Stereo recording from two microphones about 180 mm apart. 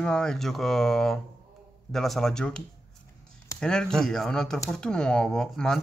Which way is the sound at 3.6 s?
5° left (ahead or behind).